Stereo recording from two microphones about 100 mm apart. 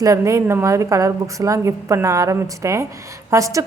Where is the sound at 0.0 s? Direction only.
35° right (ahead or behind).